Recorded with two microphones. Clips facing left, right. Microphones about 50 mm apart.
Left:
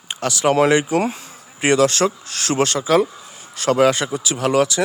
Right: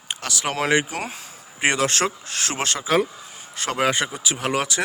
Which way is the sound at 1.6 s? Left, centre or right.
Centre.